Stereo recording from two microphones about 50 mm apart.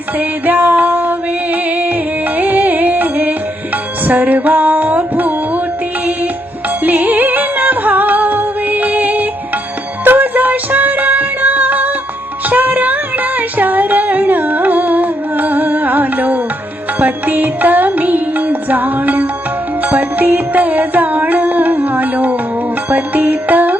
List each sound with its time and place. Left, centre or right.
0.2 s music: right
6.8 s music: right